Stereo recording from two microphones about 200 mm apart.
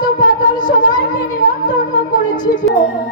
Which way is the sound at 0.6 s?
45° left (ahead or behind).